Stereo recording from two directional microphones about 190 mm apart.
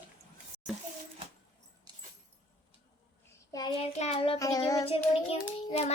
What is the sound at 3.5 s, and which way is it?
Child singing, 25° left (ahead or behind).